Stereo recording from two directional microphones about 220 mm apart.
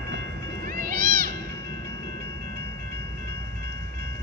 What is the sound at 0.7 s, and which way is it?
Cat, 40° right (ahead or behind).